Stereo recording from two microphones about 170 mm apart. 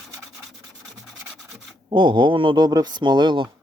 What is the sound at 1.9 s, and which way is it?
Speech, 30° right (ahead or behind).